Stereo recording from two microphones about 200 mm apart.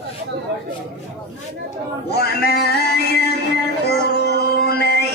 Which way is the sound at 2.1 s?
50° left (ahead or behind).